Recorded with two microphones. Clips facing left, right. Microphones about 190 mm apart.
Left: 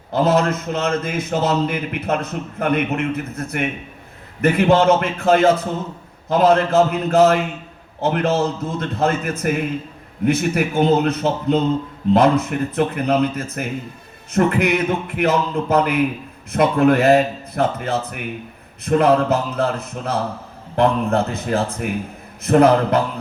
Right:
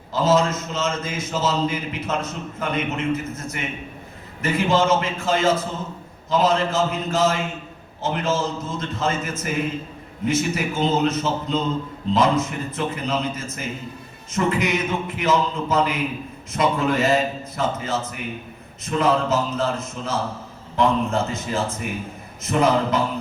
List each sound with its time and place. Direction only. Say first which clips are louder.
0.1 s a man's voice: left 2 dB; 60° left (ahead or behind)